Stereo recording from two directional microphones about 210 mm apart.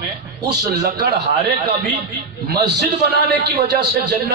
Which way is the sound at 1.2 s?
35° right (ahead or behind).